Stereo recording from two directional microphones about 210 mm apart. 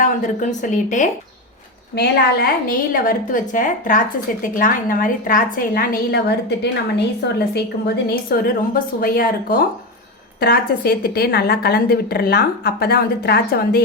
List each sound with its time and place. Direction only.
0.0 s a woman's voice: 35° left (ahead or behind)